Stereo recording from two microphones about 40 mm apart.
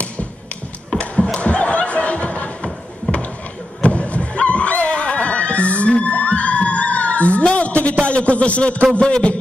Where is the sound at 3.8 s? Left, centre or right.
Left.